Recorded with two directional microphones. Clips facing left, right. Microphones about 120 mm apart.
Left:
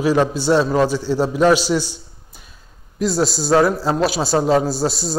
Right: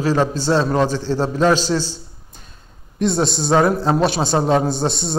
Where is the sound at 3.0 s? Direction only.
5° left (ahead or behind).